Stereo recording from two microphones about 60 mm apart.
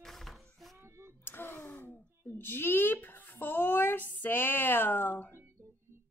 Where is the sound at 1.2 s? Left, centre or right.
Left.